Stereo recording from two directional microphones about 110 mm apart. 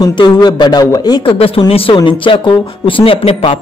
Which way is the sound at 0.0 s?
40° left (ahead or behind).